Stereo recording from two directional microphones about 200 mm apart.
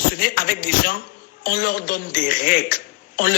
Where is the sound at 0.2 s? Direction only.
45° left (ahead or behind).